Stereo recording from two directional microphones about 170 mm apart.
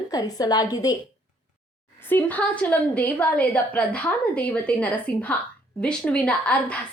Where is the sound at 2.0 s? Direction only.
10° left (ahead or behind).